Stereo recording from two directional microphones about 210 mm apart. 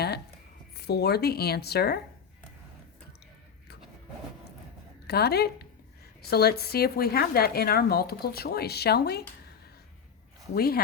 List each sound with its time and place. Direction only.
0.7 s a woman's voice: 50° left (ahead or behind)
5.0 s a woman's voice: 50° left (ahead or behind)
10.5 s a woman's voice: 45° left (ahead or behind)